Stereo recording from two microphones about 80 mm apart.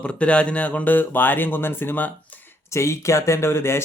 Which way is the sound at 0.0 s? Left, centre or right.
Centre.